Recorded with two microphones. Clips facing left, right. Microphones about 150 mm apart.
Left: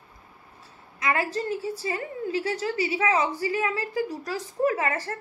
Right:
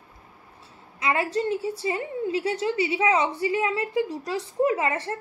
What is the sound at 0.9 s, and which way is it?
A woman's voice, 25° right (ahead or behind).